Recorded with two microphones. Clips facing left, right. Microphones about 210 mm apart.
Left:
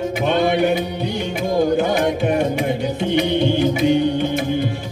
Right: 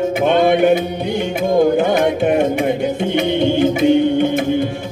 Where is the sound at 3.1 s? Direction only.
55° right (ahead or behind).